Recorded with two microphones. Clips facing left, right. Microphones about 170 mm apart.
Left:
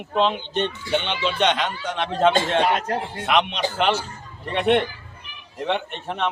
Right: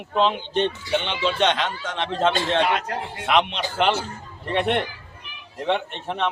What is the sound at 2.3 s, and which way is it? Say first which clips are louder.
Speech: left 1 dB; 45° left (ahead or behind).